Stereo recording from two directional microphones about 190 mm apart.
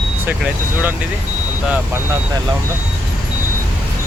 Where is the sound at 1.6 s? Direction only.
5° right (ahead or behind).